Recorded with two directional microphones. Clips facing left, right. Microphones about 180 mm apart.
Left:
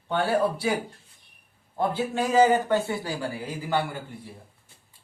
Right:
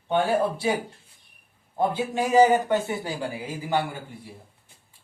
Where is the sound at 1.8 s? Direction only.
15° right (ahead or behind).